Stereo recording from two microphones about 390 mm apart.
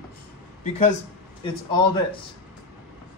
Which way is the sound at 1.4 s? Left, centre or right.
Centre.